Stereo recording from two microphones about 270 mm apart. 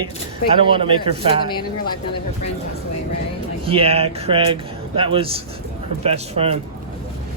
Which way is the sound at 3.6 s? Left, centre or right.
Right.